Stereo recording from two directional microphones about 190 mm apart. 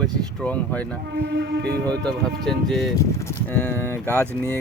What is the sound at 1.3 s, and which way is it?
Speech, 65° right (ahead or behind).